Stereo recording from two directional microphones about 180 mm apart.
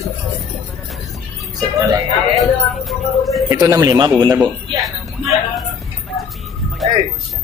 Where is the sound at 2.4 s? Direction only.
Centre (ahead or behind).